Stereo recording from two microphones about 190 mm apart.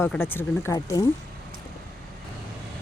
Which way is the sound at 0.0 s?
10° left (ahead or behind).